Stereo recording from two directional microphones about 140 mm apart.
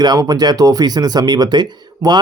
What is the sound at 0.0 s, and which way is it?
Speech, 30° right (ahead or behind).